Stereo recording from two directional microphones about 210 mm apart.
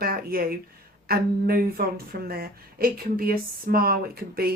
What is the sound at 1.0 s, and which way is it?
Speech, 45° right (ahead or behind).